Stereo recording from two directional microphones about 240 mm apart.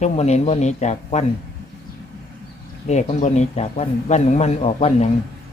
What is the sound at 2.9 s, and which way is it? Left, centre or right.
A man's voice, left.